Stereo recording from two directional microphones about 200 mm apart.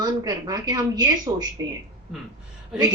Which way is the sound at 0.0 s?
20° right (ahead or behind).